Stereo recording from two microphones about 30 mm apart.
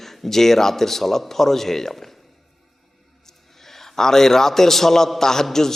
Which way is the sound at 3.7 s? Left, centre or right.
Centre.